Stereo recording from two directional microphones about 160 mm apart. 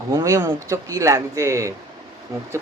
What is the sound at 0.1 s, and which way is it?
A woman's voice, 20° right (ahead or behind).